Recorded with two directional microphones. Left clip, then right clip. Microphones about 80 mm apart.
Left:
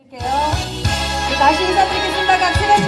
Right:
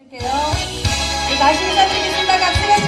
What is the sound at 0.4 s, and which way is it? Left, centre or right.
Music, right.